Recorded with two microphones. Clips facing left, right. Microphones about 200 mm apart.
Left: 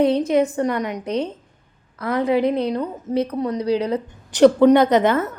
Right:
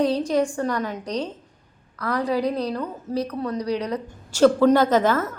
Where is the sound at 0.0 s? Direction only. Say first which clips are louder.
Left 4 dB; 20° left (ahead or behind).